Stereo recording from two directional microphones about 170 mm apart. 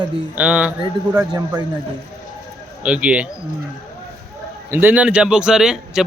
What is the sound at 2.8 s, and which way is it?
Speech, 5° right (ahead or behind).